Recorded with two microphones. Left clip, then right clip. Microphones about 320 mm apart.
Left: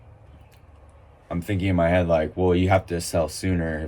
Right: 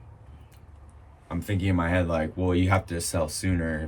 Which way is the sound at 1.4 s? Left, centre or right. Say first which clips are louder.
Left 5 dB; centre.